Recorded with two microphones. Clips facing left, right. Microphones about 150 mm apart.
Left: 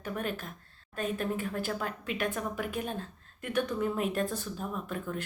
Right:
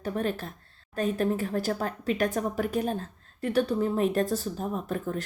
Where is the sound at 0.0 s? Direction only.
35° right (ahead or behind).